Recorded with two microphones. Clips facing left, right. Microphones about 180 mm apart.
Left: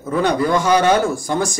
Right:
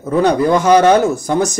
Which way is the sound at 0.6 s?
40° right (ahead or behind).